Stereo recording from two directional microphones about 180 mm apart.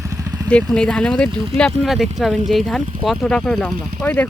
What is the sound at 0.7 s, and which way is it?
Speech, 5° left (ahead or behind).